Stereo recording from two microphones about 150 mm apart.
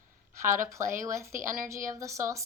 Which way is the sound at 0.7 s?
20° right (ahead or behind).